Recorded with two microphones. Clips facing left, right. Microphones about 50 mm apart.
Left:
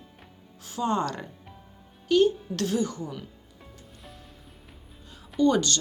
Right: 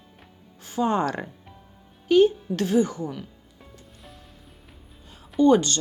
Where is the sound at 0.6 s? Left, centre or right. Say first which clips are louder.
Right 3 dB; centre.